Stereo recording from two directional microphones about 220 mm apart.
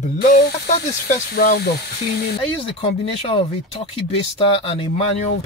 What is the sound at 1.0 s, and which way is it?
Speech, 45° left (ahead or behind).